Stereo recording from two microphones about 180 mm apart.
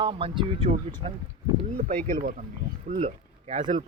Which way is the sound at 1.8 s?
50° right (ahead or behind).